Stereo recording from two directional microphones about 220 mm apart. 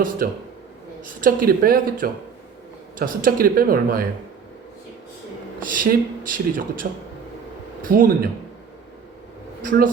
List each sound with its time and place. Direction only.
0.2 s speech: 40° right (ahead or behind)
5.7 s speech: 40° right (ahead or behind)
7.9 s speech: 40° right (ahead or behind)
9.6 s speech: 40° right (ahead or behind)